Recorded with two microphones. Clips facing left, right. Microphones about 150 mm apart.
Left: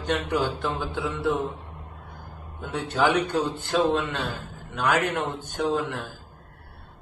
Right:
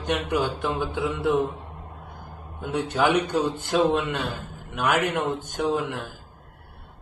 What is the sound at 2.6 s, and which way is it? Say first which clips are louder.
A man's voice: right 1 dB; 10° right (ahead or behind).